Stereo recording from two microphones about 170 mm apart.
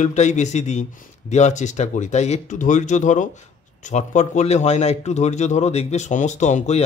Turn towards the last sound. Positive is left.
turn(degrees=40)  # may be behind; listen again after turning